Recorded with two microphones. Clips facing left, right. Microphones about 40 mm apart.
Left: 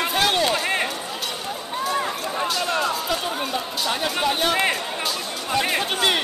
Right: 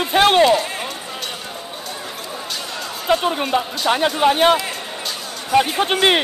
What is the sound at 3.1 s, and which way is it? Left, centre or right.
Speech, right.